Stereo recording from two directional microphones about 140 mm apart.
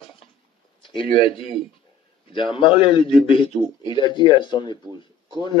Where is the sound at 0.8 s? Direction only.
40° left (ahead or behind).